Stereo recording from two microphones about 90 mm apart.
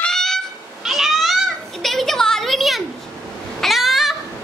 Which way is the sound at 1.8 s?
5° left (ahead or behind).